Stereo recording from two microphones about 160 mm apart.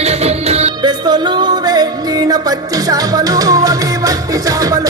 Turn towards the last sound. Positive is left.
turn(degrees=-20)  # may be behind; listen again after turning